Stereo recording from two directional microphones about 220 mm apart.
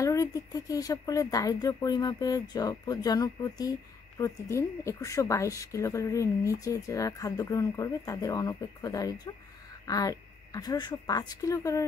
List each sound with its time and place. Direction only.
0.0 s speech: 15° left (ahead or behind)